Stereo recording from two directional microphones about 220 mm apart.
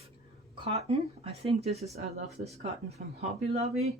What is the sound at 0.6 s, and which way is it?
Speech, 25° right (ahead or behind).